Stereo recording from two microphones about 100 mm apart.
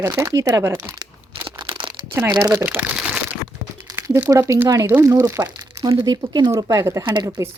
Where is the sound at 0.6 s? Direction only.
20° right (ahead or behind).